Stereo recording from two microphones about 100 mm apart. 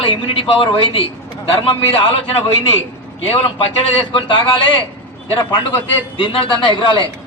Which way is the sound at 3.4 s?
65° left (ahead or behind).